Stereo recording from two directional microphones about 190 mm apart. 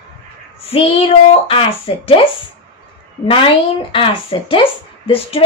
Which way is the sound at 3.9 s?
25° left (ahead or behind).